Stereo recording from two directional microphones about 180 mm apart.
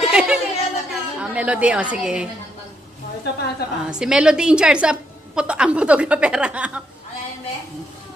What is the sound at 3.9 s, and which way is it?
A woman's voice, 5° right (ahead or behind).